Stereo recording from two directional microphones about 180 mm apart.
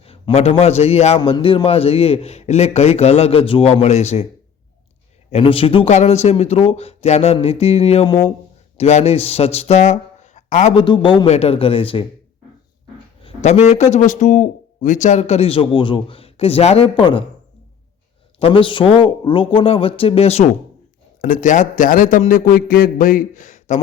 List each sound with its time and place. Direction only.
0.0 s a man's voice: 30° left (ahead or behind)
5.3 s a man's voice: 30° left (ahead or behind)
10.8 s a man's voice: 25° left (ahead or behind)
13.2 s a man's voice: 35° left (ahead or behind)
18.3 s a man's voice: 30° left (ahead or behind)
21.2 s a man's voice: 50° left (ahead or behind)